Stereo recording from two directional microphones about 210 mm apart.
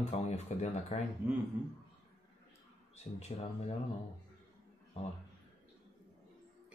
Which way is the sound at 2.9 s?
30° left (ahead or behind).